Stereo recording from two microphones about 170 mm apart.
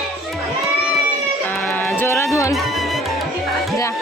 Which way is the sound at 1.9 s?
15° left (ahead or behind).